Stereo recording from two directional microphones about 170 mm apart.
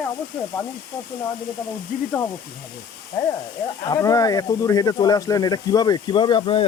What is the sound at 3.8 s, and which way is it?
Speech, 20° left (ahead or behind).